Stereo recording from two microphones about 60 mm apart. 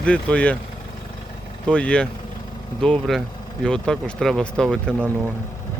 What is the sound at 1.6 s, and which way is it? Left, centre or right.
Speech, centre.